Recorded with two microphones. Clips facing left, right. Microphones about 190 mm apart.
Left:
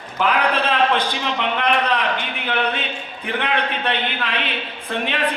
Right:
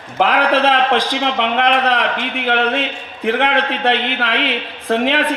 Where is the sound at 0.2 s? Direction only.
80° right.